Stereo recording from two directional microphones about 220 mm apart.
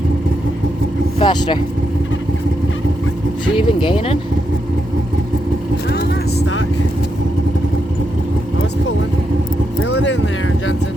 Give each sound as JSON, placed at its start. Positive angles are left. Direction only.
{"t": 1.2, "sound": "speech", "side_deg": 20}
{"t": 3.5, "sound": "speech", "side_deg": 20}
{"t": 9.8, "sound": "vehicle", "side_deg": 55}